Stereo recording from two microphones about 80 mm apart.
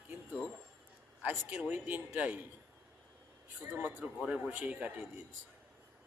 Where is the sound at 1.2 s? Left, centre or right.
Centre.